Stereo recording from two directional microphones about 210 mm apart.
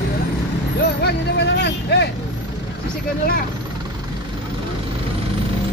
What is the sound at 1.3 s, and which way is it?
Vehicle, 55° left (ahead or behind).